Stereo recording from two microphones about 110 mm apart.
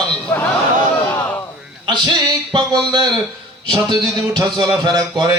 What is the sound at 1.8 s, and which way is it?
Speech, 45° right (ahead or behind).